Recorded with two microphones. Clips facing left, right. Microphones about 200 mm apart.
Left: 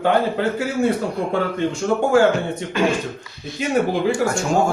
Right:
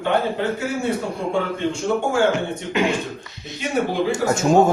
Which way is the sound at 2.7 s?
20° right (ahead or behind).